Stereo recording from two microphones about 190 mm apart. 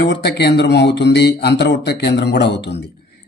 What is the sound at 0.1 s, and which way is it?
Speech, 65° left (ahead or behind).